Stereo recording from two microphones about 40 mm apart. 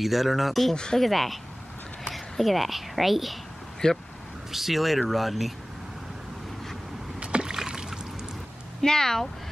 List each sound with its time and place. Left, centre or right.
0.0 s a woman's voice: centre
3.8 s speech: centre
4.5 s speech: centre
7.2 s rowboat: right
7.4 s rowboat: centre
8.8 s speech: centre